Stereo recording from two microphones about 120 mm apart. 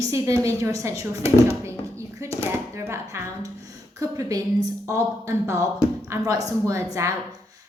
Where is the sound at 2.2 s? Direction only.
25° right (ahead or behind).